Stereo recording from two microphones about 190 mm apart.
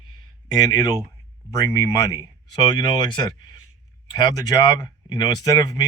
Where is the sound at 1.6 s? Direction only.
20° left (ahead or behind).